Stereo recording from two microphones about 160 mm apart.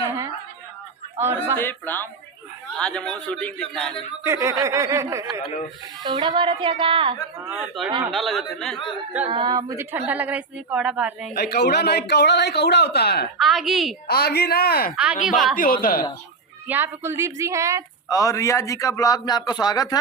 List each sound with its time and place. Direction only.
0.0 s a sound: 20° right (ahead or behind)
1.5 s a man's voice: 15° left (ahead or behind)
4.2 s speech: 15° right (ahead or behind)
7.8 s a man's voice: centre (ahead or behind)
9.3 s speech: 30° right (ahead or behind); by 11.3 s 5° right (ahead or behind)
11.3 s a man's voice: 90° left
13.4 s a man's voice: centre (ahead or behind)
14.1 s speech: 75° left (ahead or behind)
14.9 s a man's voice: 5° right (ahead or behind)
15.5 s a woman's voice: 60° left (ahead or behind)
16.6 s speech: 15° right (ahead or behind)
18.1 s a man's voice: 20° left (ahead or behind)